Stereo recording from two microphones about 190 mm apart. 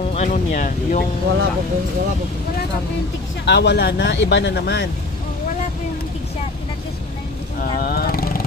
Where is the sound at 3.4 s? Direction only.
65° left (ahead or behind).